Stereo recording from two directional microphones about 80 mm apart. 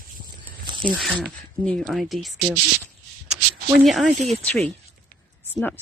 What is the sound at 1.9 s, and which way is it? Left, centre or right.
Speech, centre.